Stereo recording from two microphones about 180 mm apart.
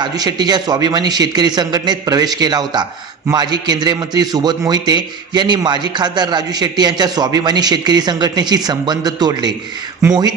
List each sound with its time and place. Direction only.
0.0 s a man's voice: 20° right (ahead or behind)